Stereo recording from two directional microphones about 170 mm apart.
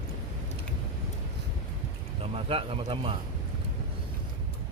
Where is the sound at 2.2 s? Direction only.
35° right (ahead or behind).